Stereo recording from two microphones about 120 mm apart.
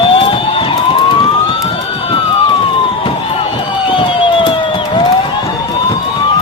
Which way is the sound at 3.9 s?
45° left (ahead or behind).